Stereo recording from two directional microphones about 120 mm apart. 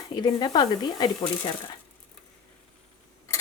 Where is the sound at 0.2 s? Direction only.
35° left (ahead or behind).